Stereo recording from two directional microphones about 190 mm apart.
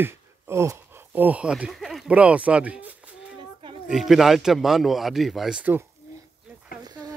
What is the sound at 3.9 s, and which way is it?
A man's voice, centre (ahead or behind).